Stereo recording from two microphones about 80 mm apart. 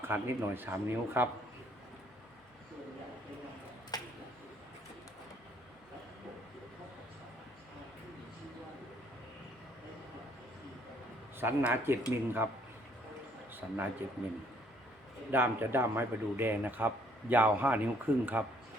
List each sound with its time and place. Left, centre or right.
0.0 s speech: right
3.9 s a sound: left
11.3 s speech: right
13.6 s a man's voice: right
15.3 s speech: right